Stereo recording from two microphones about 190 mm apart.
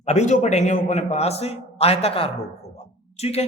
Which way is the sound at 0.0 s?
35° left (ahead or behind).